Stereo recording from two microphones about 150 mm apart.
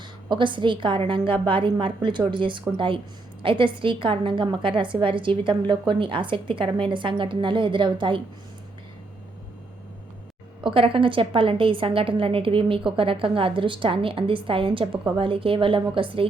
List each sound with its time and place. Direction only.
0.3 s a woman's voice: 30° right (ahead or behind)
10.6 s a woman's voice: 35° right (ahead or behind)